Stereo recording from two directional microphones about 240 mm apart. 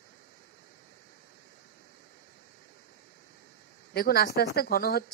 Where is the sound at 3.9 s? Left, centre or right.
Left.